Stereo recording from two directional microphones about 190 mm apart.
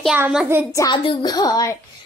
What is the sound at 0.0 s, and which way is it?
Speech, 5° right (ahead or behind).